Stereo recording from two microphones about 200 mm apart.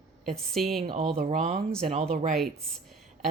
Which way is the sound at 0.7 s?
45° right (ahead or behind).